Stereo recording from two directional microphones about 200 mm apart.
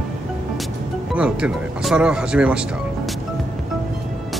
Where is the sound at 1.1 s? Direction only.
5° right (ahead or behind).